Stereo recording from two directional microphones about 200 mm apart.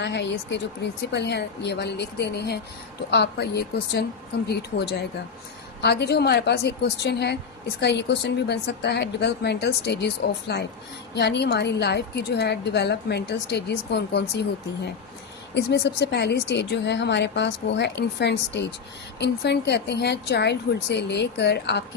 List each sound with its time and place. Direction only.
0.0 s a woman's voice: 60° left (ahead or behind)
15.5 s a woman's voice: 55° left (ahead or behind)